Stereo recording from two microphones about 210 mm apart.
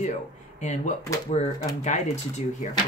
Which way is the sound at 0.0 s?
35° left (ahead or behind).